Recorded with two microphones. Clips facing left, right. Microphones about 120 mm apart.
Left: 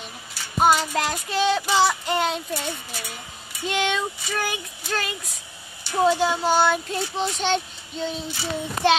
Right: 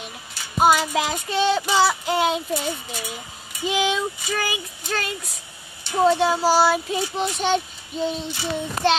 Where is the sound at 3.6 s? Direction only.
Centre (ahead or behind).